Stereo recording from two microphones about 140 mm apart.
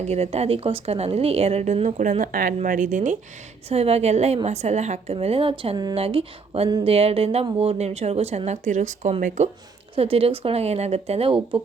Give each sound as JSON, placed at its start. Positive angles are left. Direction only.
{"t": 0.1, "sound": "a woman's voice", "side_deg": -50}
{"t": 2.6, "sound": "speech", "side_deg": -70}
{"t": 3.7, "sound": "a woman's voice", "side_deg": -45}
{"t": 9.9, "sound": "a woman's voice", "side_deg": -45}